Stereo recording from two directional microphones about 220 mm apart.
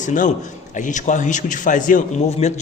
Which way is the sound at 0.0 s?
35° left (ahead or behind).